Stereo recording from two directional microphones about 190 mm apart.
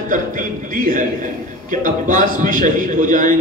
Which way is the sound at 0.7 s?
45° right (ahead or behind).